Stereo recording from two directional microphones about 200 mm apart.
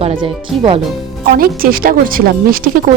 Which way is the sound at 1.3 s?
45° right (ahead or behind).